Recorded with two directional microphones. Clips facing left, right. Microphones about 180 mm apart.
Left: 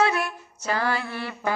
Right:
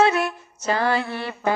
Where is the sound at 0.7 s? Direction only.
25° right (ahead or behind).